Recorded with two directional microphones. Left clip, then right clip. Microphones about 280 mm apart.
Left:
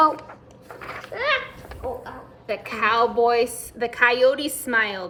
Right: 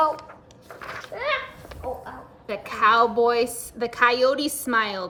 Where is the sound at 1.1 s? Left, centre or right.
Left.